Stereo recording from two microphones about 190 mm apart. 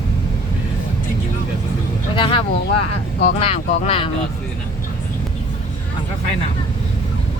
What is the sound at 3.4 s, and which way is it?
Speech, 30° left (ahead or behind).